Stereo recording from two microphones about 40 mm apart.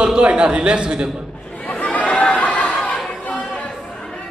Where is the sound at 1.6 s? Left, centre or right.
Left.